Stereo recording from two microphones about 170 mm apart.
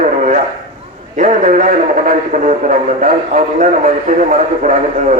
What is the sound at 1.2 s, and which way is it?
A man's voice, 45° right (ahead or behind).